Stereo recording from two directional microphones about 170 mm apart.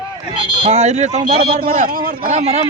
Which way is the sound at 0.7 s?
40° right (ahead or behind).